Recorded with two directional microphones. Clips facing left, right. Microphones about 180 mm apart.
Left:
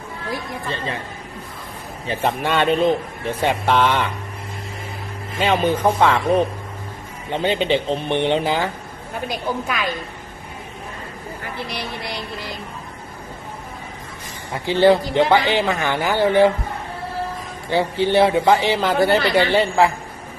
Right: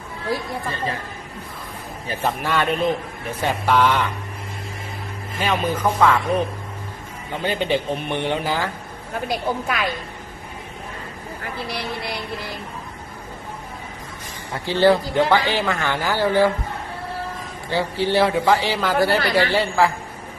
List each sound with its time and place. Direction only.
0.3 s a man's voice: 25° left (ahead or behind)
2.0 s a man's voice: 25° left (ahead or behind)
5.4 s a man's voice: 30° left (ahead or behind)
14.5 s a man's voice: 15° left (ahead or behind)
17.7 s a man's voice: 20° left (ahead or behind)